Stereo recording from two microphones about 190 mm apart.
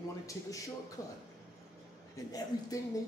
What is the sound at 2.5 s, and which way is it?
Speech, 20° left (ahead or behind).